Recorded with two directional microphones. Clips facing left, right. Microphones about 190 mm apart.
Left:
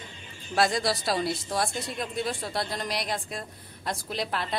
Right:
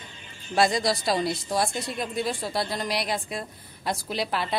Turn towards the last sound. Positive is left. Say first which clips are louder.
# right 3 dB
turn(degrees=-5)  # may be behind; listen again after turning